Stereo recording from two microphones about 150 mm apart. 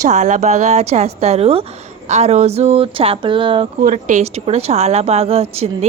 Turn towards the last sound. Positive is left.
turn(degrees=-40)  # may be behind; listen again after turning